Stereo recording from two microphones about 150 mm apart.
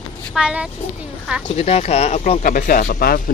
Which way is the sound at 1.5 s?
45° left (ahead or behind).